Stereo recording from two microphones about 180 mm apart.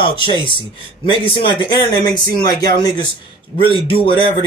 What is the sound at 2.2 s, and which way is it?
Speech, 60° right (ahead or behind).